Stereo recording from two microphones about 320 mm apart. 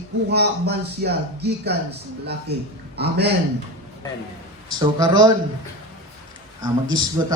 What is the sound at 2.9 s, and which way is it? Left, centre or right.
Speech, right.